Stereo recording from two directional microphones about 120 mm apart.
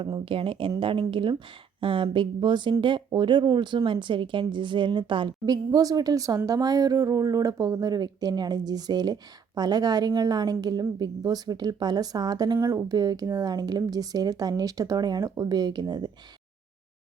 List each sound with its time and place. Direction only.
0.0 s a woman's voice: 45° right (ahead or behind)